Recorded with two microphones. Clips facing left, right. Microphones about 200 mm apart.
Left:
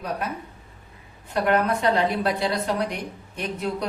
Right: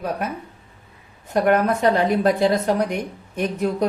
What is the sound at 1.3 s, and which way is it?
A woman's voice, 45° right (ahead or behind).